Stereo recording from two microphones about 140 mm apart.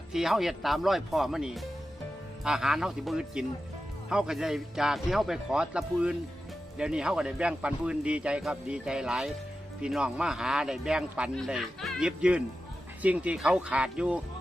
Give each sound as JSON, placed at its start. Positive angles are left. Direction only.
{"t": 0.1, "sound": "a man's voice", "side_deg": -5}